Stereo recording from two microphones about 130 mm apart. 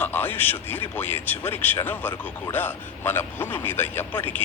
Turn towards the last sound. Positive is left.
turn(degrees=15)  # may be behind; listen again after turning